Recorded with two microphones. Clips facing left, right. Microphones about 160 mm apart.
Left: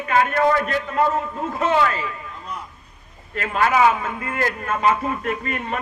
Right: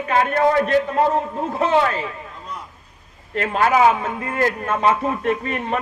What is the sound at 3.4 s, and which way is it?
A man's voice, 35° right (ahead or behind).